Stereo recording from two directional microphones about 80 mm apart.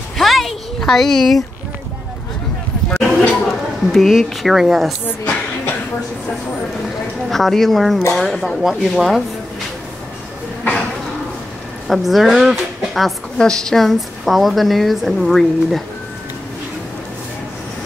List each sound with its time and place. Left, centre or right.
0.2 s a sound: centre
2.9 s a sound: centre
3.9 s a woman's voice: centre
5.0 s speech: left
7.2 s a woman's voice: centre
11.9 s a woman's voice: centre